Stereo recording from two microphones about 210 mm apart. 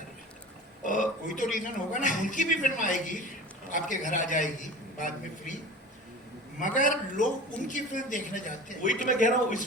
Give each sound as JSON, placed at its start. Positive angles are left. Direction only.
{"t": 0.9, "sound": "a man's voice", "side_deg": 35}
{"t": 6.6, "sound": "a man's voice", "side_deg": 35}